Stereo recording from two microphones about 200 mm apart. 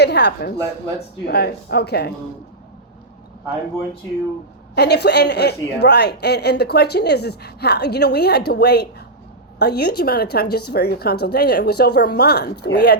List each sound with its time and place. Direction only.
0.0 s a woman's voice: 55° left (ahead or behind)
4.7 s a woman's voice: 55° left (ahead or behind)